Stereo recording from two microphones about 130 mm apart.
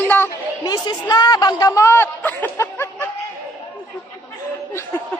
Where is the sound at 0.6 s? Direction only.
30° left (ahead or behind).